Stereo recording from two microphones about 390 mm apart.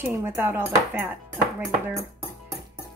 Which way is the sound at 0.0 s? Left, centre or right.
Centre.